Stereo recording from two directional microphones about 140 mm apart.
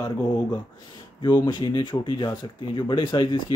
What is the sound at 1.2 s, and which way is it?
Speech, 35° left (ahead or behind).